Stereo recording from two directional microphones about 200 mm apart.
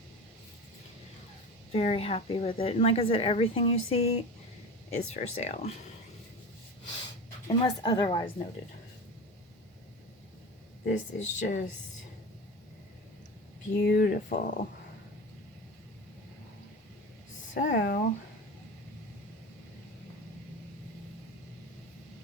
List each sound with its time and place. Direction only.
1.7 s a woman's voice: 30° left (ahead or behind)
7.4 s a woman's voice: 20° left (ahead or behind)
10.8 s speech: 40° left (ahead or behind)
13.8 s speech: 50° left (ahead or behind)
17.5 s speech: 40° left (ahead or behind)